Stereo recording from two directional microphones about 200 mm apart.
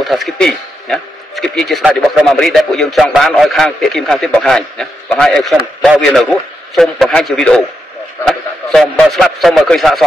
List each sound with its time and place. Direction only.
0.0 s a man's voice: centre (ahead or behind)